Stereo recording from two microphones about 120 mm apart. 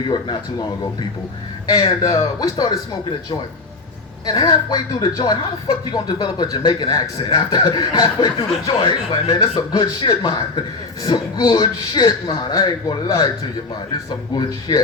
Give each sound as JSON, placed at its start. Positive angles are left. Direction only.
{"t": 1.6, "sound": "a woman's voice", "side_deg": 30}
{"t": 4.3, "sound": "a woman's voice", "side_deg": 35}
{"t": 14.7, "sound": "a woman's voice", "side_deg": 35}